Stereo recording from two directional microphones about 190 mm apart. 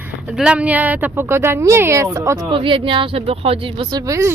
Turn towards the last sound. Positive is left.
turn(degrees=-15)  # may be behind; listen again after turning